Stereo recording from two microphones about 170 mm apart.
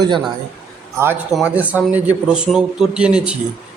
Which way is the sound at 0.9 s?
15° right (ahead or behind).